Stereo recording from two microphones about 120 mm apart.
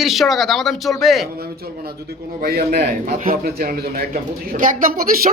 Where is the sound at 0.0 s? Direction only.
Centre (ahead or behind).